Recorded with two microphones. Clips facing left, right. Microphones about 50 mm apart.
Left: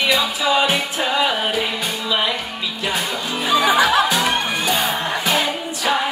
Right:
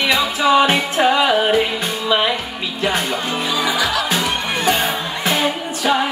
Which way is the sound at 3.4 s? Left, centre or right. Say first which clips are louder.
Left 6 dB; left.